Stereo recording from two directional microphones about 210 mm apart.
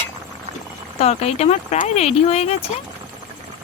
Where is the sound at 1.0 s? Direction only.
30° left (ahead or behind).